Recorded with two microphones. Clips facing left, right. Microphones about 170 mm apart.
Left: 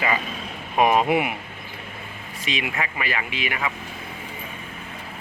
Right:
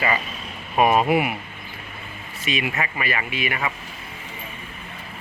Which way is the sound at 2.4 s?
15° left (ahead or behind).